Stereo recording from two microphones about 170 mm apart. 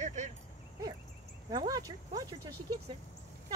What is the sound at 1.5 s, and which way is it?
Speech, 25° right (ahead or behind).